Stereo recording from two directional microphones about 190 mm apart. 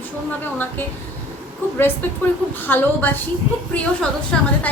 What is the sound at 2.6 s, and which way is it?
Speech, 10° left (ahead or behind).